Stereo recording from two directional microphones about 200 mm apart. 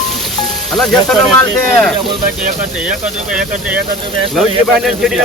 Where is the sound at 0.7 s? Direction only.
Centre (ahead or behind).